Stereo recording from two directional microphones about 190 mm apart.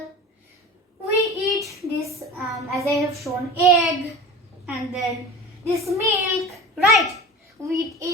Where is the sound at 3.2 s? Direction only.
Centre (ahead or behind).